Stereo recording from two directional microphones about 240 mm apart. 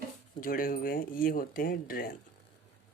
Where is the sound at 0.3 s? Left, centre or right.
Left.